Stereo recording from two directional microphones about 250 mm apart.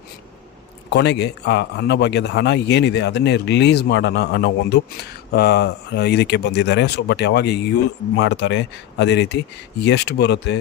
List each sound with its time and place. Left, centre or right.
0.9 s a man's voice: left